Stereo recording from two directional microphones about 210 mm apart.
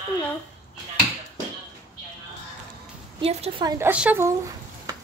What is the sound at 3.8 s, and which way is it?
Speech, 5° right (ahead or behind).